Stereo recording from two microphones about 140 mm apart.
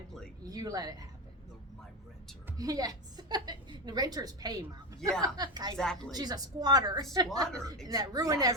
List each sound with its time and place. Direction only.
0.4 s a woman's voice: 25° right (ahead or behind)
2.6 s a woman's voice: 25° right (ahead or behind)
5.7 s a woman's voice: 5° left (ahead or behind)
6.1 s a woman's voice: 30° right (ahead or behind)